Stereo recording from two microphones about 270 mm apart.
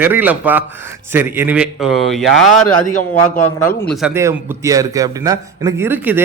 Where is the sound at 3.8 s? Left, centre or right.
Centre.